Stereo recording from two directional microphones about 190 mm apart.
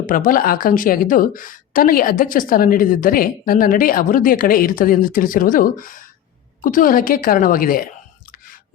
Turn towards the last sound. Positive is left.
turn(degrees=50)  # may be behind; listen again after turning